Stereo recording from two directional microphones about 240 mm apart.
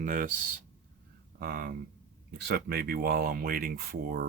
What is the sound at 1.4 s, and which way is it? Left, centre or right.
Speech, right.